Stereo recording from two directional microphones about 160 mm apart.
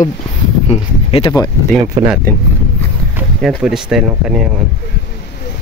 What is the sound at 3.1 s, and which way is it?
Speech, 5° right (ahead or behind).